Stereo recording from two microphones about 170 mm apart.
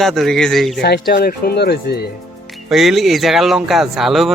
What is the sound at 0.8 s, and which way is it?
Speech, 75° left (ahead or behind).